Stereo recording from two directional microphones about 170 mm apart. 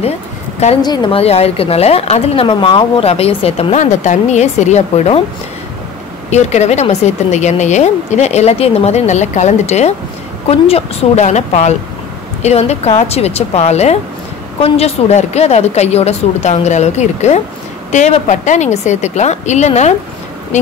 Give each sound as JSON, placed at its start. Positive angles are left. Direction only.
{"t": 0.8, "sound": "a woman's voice", "side_deg": 25}
{"t": 6.3, "sound": "a woman's voice", "side_deg": 40}